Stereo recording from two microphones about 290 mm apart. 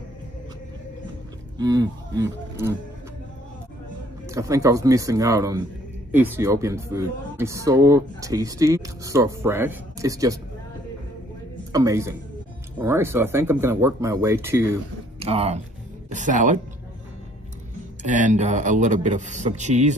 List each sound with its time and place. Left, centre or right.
1.6 s speech: centre
4.3 s speech: centre
11.7 s speech: centre
15.1 s speech: right
18.0 s speech: right